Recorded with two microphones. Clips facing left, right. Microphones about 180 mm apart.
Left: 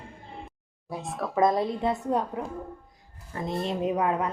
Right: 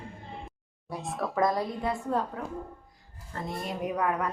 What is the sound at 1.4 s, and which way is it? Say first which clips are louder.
A woman's voice: left 5 dB; 25° left (ahead or behind).